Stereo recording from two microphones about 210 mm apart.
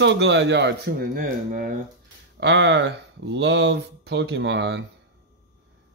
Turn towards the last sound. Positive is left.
turn(degrees=-55)  # may be behind; listen again after turning